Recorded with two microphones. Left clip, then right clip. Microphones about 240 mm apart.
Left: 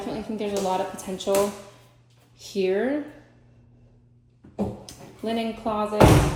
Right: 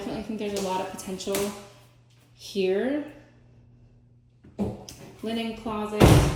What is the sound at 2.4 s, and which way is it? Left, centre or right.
Speech, centre.